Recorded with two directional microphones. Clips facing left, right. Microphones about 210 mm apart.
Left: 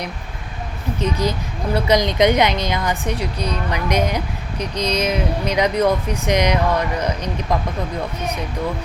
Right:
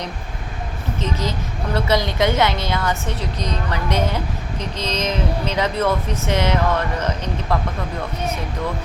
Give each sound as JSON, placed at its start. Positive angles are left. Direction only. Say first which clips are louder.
{"t": 0.9, "sound": "a woman's voice", "louder": "left 4 dB", "side_deg": 15}